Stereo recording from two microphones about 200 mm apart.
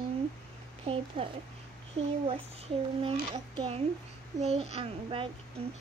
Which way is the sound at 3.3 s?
30° right (ahead or behind).